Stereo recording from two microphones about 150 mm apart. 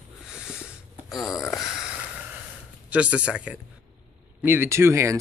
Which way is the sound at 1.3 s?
20° left (ahead or behind).